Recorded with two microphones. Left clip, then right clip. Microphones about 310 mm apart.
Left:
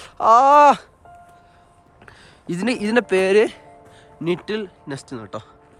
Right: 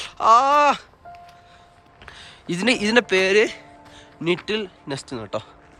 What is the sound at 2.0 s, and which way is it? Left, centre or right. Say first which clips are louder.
Speech: right 1 dB; centre.